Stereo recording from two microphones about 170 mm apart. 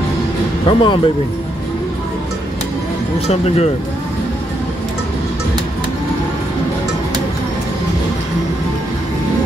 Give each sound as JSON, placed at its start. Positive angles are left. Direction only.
{"t": 0.7, "sound": "speech", "side_deg": 30}
{"t": 3.3, "sound": "speech", "side_deg": 40}